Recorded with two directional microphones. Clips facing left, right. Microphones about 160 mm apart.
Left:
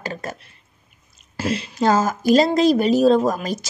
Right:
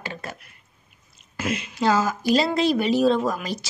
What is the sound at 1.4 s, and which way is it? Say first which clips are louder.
A woman's voice: left 4 dB; 35° left (ahead or behind).